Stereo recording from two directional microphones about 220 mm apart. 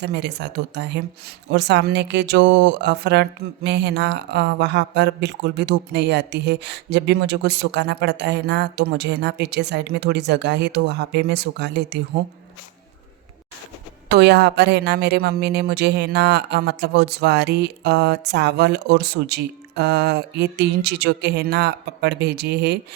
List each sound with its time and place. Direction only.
0.0 s speech: 50° right (ahead or behind)
14.1 s speech: 50° right (ahead or behind)